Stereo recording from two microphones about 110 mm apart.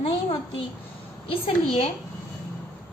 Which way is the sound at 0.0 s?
55° left (ahead or behind).